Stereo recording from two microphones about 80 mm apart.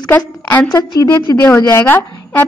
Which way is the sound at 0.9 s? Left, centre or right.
Left.